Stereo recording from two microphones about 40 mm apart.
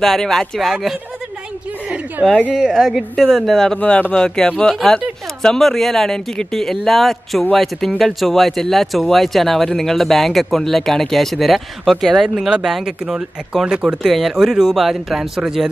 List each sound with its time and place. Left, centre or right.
0.0 s speech: centre
2.2 s a woman's voice: right
2.5 s speech: centre
5.6 s speech: centre
12.4 s speech: centre
14.1 s speech: centre